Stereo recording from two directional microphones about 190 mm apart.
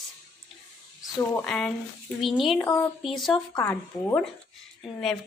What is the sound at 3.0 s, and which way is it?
Speech, centre (ahead or behind).